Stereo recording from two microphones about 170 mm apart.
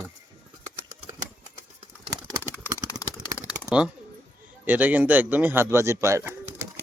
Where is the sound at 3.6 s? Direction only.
5° right (ahead or behind).